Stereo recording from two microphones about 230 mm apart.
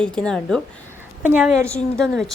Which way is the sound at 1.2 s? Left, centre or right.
Centre.